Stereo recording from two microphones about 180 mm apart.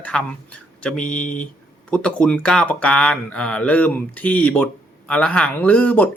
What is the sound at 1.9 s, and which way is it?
Speech, 5° left (ahead or behind).